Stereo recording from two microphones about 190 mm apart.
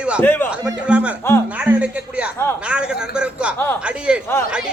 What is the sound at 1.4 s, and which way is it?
Music, 5° right (ahead or behind).